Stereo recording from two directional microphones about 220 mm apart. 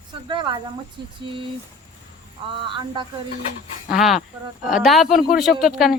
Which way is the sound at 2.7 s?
20° right (ahead or behind).